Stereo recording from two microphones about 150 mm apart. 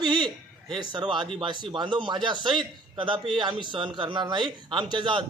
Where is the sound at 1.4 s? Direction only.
30° right (ahead or behind).